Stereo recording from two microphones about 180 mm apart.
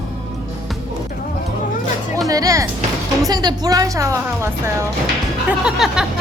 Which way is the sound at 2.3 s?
20° right (ahead or behind).